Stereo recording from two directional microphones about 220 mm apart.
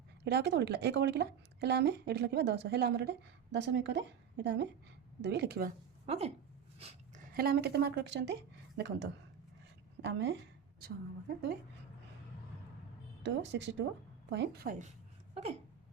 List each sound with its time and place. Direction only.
0.3 s a woman's voice: 50° right (ahead or behind)
6.1 s speech: 30° right (ahead or behind)
7.3 s a woman's voice: 45° right (ahead or behind)
10.0 s a woman's voice: 55° right (ahead or behind)
13.2 s a woman's voice: 55° right (ahead or behind)